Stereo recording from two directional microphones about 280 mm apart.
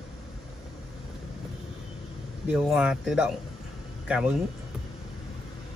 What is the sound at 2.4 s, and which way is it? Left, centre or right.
Speech, centre.